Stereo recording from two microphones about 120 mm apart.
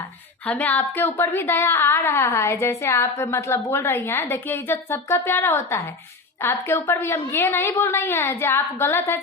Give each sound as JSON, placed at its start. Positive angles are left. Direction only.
{"t": 0.4, "sound": "a woman's voice", "side_deg": 15}